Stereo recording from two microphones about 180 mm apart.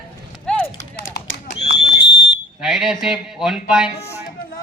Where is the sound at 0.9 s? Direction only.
65° left (ahead or behind).